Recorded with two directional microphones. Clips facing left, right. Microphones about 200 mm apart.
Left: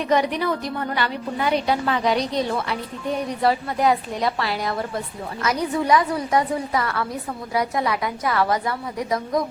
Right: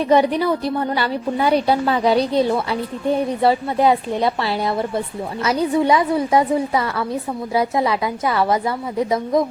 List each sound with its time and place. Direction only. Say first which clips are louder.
0.1 s a woman's voice: right 5 dB; 30° right (ahead or behind)